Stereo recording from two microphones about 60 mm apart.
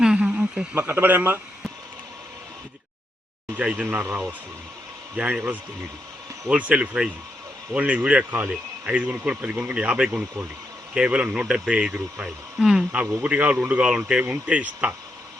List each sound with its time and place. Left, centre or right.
0.2 s a sound: centre
0.8 s speech: right
3.6 s speech: right
3.8 s speech: right
5.1 s a man's voice: right